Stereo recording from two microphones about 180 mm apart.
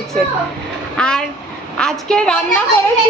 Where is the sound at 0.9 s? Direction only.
5° left (ahead or behind).